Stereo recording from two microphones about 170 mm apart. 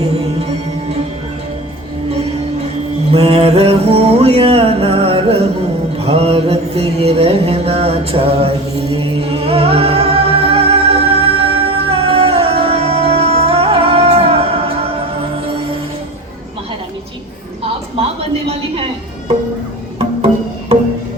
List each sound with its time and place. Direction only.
0.0 s music: 35° right (ahead or behind)
3.1 s mantra: 35° right (ahead or behind)
18.4 s a sound: 35° right (ahead or behind)
20.0 s music: 35° right (ahead or behind)